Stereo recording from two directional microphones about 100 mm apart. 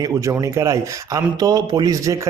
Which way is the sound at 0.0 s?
35° right (ahead or behind).